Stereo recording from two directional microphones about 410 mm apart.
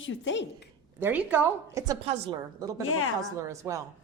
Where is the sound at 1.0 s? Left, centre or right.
Centre.